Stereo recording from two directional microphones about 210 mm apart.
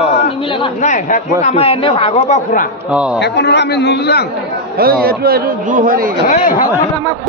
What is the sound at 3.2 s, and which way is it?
A man's voice, 55° left (ahead or behind).